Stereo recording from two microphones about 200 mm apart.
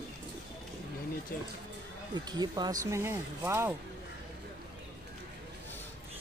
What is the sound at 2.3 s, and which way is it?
Speech, 20° right (ahead or behind).